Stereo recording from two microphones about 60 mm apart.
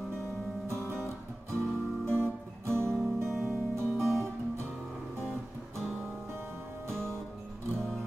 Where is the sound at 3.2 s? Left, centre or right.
Centre.